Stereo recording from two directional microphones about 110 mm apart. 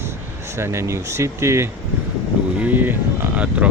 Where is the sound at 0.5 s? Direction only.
25° right (ahead or behind).